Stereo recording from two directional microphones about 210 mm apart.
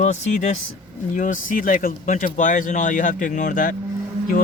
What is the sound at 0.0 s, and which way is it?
Speech, 35° left (ahead or behind).